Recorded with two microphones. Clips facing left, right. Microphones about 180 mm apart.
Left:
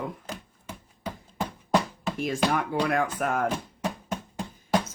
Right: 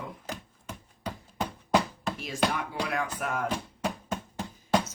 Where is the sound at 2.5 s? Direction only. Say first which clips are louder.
Left 6 dB; 50° left (ahead or behind).